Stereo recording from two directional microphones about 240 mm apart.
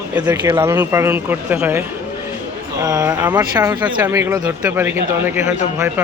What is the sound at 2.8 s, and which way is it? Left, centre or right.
A man's voice, centre.